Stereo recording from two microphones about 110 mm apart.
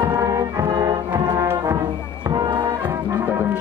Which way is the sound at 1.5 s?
30° right (ahead or behind).